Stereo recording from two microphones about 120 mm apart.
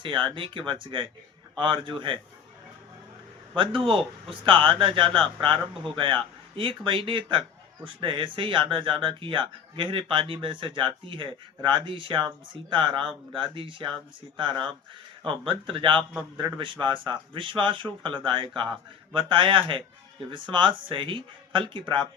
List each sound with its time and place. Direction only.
0.0 s speech: 45° right (ahead or behind)
3.5 s speech: 45° right (ahead or behind)
15.2 s speech: 45° right (ahead or behind)